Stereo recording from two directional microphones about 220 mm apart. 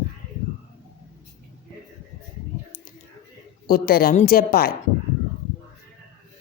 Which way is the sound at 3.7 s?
40° left (ahead or behind).